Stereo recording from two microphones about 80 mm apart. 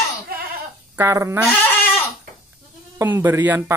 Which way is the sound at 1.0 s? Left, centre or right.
Right.